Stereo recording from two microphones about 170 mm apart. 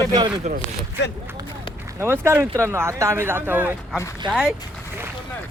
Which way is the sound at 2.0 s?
15° right (ahead or behind).